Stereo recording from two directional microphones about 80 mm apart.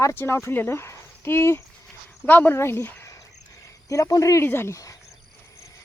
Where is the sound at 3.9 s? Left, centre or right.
Left.